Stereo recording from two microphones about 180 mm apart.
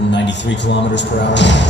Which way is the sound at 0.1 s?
80° left.